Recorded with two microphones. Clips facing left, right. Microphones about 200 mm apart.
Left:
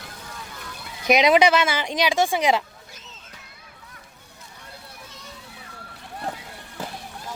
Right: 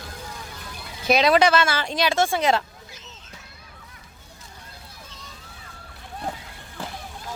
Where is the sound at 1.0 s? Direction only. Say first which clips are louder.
Left 1 dB; 15° left (ahead or behind).